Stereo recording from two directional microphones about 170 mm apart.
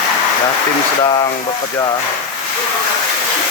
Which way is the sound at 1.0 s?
25° left (ahead or behind).